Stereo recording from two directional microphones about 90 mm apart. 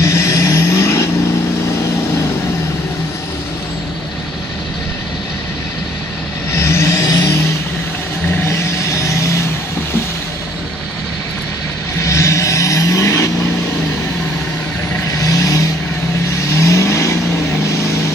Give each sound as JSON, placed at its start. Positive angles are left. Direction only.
{"t": 0.0, "sound": "vehicle", "side_deg": 35}
{"t": 6.5, "sound": "vehicle", "side_deg": 30}
{"t": 8.5, "sound": "vehicle", "side_deg": 35}
{"t": 12.0, "sound": "vehicle", "side_deg": 35}
{"t": 15.2, "sound": "vehicle", "side_deg": 40}